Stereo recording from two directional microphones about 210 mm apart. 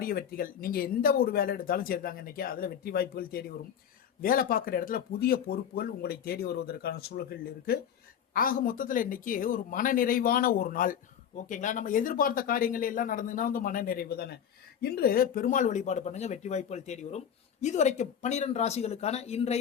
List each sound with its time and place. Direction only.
0.0 s speech: 45° left (ahead or behind); by 19.5 s 30° left (ahead or behind)